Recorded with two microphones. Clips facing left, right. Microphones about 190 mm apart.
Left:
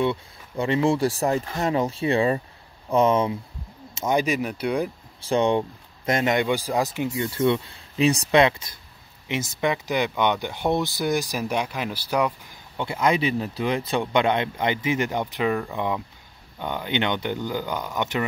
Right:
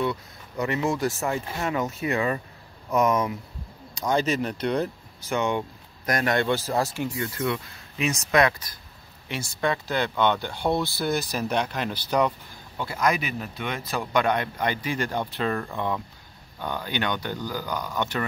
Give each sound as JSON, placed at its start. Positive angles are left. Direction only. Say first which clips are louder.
{"t": 0.0, "sound": "speech", "louder": "left 3 dB", "side_deg": 25}
{"t": 5.2, "sound": "speech", "louder": "left 5 dB", "side_deg": 30}
{"t": 12.7, "sound": "speech", "louder": "left 3 dB", "side_deg": 25}